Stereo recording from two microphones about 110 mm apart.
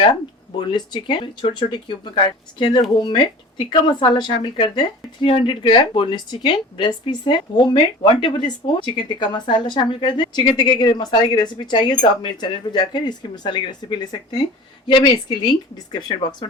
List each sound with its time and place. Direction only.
0.7 s speech: 45° left (ahead or behind)